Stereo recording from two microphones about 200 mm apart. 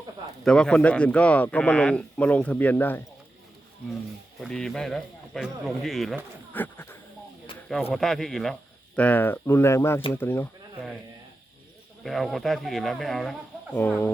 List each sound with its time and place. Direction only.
0.4 s a man's voice: 5° left (ahead or behind)
4.4 s speech: centre (ahead or behind)
6.5 s a sound: 10° left (ahead or behind)
7.9 s a man's voice: centre (ahead or behind)
12.0 s speech: centre (ahead or behind)